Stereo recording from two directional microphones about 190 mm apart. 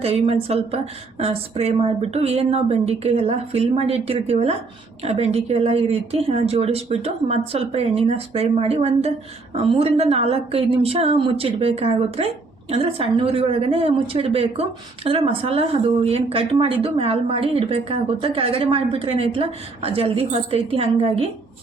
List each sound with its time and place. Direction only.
0.0 s a woman's voice: 30° right (ahead or behind)